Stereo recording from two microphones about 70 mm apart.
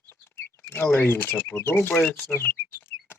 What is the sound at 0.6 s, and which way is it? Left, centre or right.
Speech, left.